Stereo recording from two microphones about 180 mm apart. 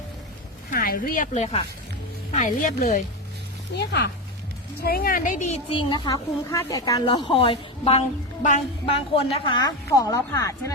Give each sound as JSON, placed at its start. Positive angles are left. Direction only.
{"t": 0.7, "sound": "a woman's voice", "side_deg": 55}
{"t": 3.8, "sound": "speech", "side_deg": 70}
{"t": 4.8, "sound": "a woman's voice", "side_deg": 55}
{"t": 5.7, "sound": "a woman's voice", "side_deg": 25}
{"t": 9.1, "sound": "speech", "side_deg": 30}